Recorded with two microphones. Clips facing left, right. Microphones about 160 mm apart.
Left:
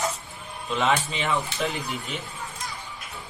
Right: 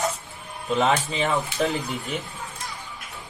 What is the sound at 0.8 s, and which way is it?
Speech, 40° right (ahead or behind).